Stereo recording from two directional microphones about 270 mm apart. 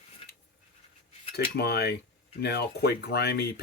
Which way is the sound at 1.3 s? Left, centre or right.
Left.